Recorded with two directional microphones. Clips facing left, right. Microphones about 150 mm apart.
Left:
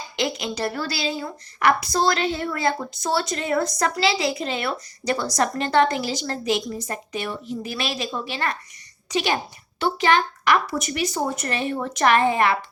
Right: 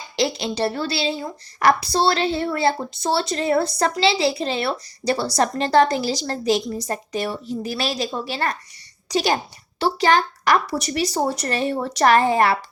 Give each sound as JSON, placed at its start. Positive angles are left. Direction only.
{"t": 0.2, "sound": "a woman's voice", "side_deg": -35}